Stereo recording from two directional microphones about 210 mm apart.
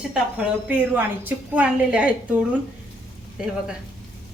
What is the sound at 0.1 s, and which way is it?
A woman's voice, 5° right (ahead or behind).